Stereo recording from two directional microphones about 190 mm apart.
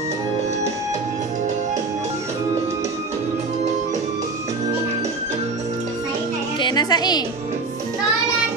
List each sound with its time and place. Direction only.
6.6 s a woman's voice: 20° left (ahead or behind)